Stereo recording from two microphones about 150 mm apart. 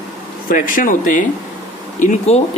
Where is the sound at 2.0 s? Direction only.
50° left (ahead or behind).